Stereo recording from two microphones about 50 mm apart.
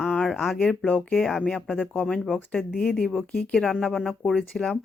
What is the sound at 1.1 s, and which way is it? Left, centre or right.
Speech, centre.